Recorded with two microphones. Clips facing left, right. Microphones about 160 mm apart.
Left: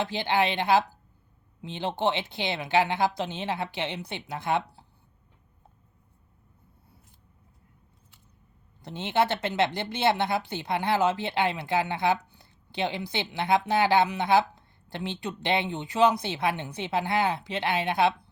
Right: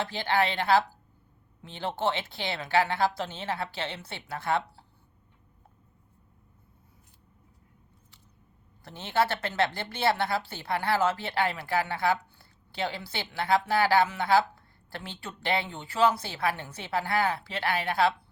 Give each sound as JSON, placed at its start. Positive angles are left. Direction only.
{"t": 0.0, "sound": "a woman's voice", "side_deg": 20}
{"t": 8.8, "sound": "speech", "side_deg": 20}